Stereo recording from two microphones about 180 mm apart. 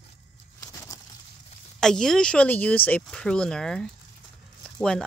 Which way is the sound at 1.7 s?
5° left (ahead or behind).